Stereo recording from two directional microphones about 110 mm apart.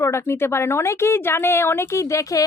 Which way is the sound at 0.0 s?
25° left (ahead or behind).